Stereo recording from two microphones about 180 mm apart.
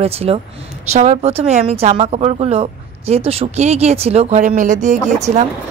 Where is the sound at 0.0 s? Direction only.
35° right (ahead or behind).